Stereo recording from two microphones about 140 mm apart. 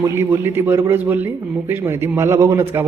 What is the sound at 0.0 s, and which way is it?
A man's voice, 20° right (ahead or behind).